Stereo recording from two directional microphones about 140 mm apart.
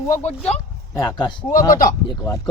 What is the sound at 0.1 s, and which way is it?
Speech, 50° left (ahead or behind).